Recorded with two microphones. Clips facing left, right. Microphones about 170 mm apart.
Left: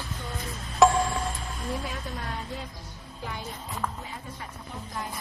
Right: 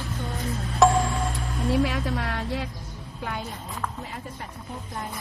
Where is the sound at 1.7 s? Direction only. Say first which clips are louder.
Right 10 dB; 80° right.